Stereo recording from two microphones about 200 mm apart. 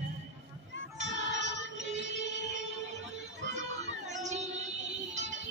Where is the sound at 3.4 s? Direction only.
65° right (ahead or behind).